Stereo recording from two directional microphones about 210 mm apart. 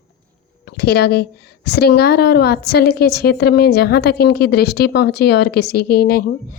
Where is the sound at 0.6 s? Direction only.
50° left (ahead or behind).